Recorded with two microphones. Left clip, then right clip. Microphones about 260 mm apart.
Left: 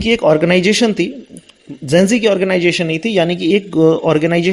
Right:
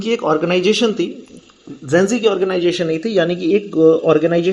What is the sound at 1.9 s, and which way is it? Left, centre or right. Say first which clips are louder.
Speech: left 2 dB; left.